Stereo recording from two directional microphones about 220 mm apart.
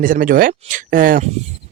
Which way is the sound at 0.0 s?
40° right (ahead or behind).